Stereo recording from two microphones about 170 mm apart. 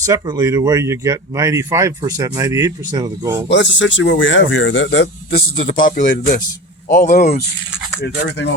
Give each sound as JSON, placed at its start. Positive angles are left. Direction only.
{"t": 0.0, "sound": "speech", "side_deg": -20}
{"t": 3.5, "sound": "speech", "side_deg": 90}
{"t": 8.0, "sound": "speech", "side_deg": 90}